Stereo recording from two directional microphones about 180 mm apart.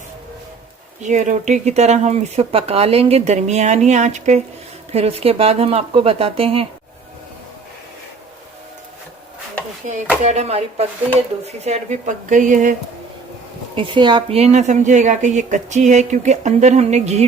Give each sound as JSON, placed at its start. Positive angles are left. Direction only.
{"t": 1.0, "sound": "speech", "side_deg": -40}
{"t": 9.8, "sound": "speech", "side_deg": -45}
{"t": 13.7, "sound": "speech", "side_deg": -25}